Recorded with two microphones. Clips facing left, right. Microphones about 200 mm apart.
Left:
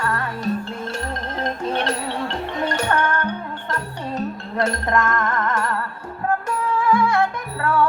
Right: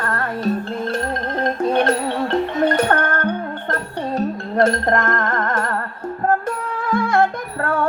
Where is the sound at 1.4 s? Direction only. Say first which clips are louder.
Right 6 dB; 55° right (ahead or behind).